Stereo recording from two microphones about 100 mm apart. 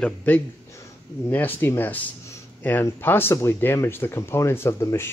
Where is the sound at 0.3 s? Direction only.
15° left (ahead or behind).